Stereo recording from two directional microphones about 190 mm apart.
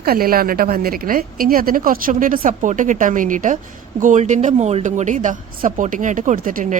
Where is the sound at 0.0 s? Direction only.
50° right (ahead or behind).